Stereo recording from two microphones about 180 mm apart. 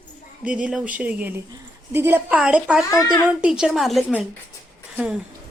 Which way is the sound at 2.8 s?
15° left (ahead or behind).